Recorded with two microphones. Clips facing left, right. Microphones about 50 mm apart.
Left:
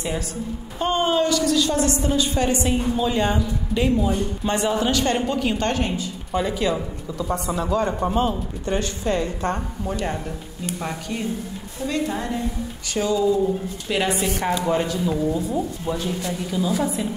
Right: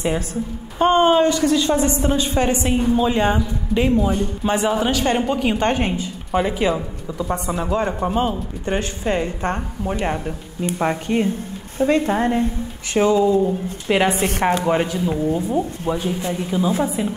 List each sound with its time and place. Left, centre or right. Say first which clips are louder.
0.7 s a woman's voice: right 6 dB; right
8.6 s a woman's voice: right 2 dB; right
14.1 s speech: right 4 dB; right
14.6 s a woman's voice: right 2 dB; right
15.2 s speech: right 3 dB; right
15.9 s a woman's voice: right 4 dB; right